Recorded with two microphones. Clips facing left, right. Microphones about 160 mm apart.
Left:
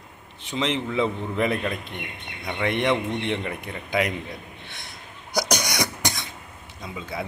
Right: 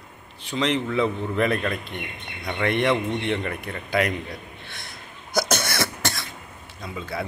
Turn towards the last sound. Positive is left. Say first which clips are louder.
# right 2 dB
turn(degrees=15)  # may be behind; listen again after turning